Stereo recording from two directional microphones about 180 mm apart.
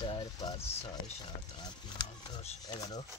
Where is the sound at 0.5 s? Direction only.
35° left (ahead or behind).